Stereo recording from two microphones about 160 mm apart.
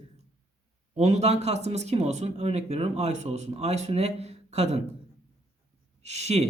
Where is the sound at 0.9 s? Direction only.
45° right (ahead or behind).